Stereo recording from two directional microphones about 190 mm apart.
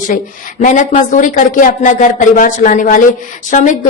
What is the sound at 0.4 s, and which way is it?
A woman's voice, 45° left (ahead or behind).